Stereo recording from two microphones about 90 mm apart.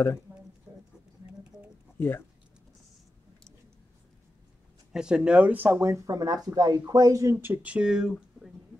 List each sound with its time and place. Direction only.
2.0 s speech: 25° left (ahead or behind)
4.9 s speech: 10° right (ahead or behind)
5.9 s speech: 40° right (ahead or behind); by 8.1 s 10° right (ahead or behind)